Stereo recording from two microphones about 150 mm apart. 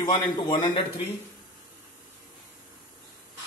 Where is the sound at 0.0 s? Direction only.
30° left (ahead or behind).